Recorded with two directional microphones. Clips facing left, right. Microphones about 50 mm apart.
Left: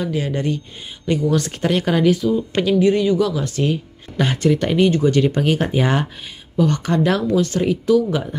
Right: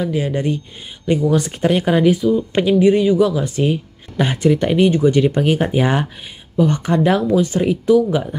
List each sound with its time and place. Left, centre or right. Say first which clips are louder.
0.0 s speech: right 2 dB; right